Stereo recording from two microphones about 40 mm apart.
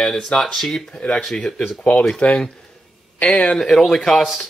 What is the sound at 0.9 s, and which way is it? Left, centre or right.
Speech, left.